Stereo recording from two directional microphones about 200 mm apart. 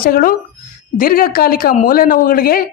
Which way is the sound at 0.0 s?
45° left (ahead or behind).